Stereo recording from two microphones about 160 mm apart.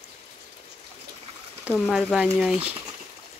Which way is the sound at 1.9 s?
5° right (ahead or behind).